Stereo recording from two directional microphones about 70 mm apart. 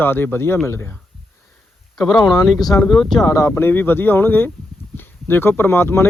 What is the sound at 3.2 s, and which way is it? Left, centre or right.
Speech, left.